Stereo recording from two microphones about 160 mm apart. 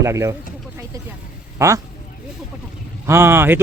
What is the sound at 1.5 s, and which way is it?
Speech, 20° right (ahead or behind).